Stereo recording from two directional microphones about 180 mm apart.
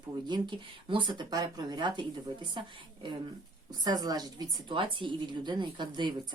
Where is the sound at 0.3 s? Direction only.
25° right (ahead or behind).